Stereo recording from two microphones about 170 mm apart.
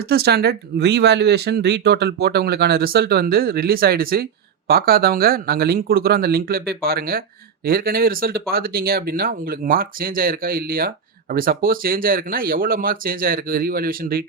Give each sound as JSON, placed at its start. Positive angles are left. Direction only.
{"t": 0.1, "sound": "speech", "side_deg": -70}